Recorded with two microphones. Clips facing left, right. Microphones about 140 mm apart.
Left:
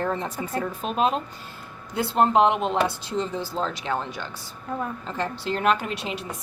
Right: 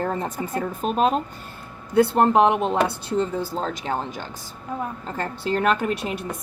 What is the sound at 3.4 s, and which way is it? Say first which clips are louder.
A woman's voice: right 1 dB; 45° right (ahead or behind).